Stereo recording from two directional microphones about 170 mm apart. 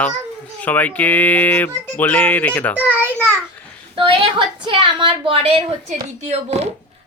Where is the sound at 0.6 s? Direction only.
10° left (ahead or behind).